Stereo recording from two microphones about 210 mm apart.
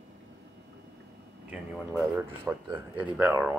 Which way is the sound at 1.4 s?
10° right (ahead or behind).